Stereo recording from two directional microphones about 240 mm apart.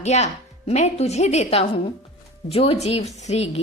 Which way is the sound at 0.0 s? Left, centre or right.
Left.